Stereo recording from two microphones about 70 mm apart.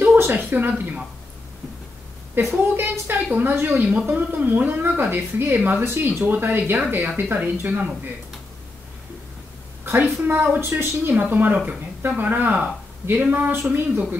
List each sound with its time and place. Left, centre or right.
0.0 s a sound: right
0.5 s a woman's voice: right
2.5 s a woman's voice: right
10.0 s a woman's voice: right